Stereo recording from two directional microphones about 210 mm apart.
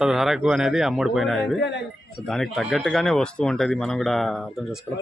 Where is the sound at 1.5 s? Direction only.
55° left (ahead or behind).